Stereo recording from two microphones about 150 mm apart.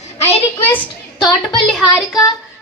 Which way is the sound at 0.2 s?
45° left (ahead or behind).